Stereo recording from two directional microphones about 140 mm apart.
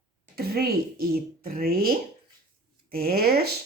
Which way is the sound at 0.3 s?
90° right.